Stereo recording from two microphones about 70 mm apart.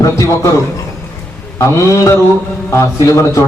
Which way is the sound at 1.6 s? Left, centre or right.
Left.